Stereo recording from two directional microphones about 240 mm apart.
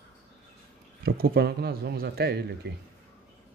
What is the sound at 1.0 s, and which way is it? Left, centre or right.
A man's voice, right.